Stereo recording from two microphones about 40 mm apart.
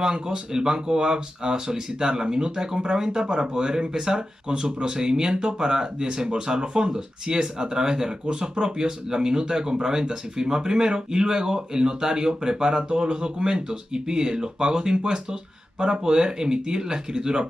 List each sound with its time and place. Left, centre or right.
0.0 s speech: centre